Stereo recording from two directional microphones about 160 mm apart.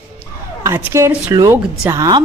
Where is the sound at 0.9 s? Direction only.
15° right (ahead or behind).